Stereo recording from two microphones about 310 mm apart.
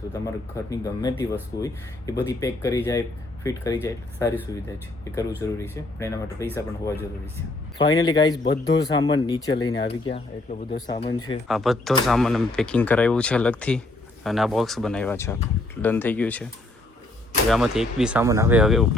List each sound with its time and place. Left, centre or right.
0.1 s speech: centre
11.4 s speech: centre
17.5 s speech: centre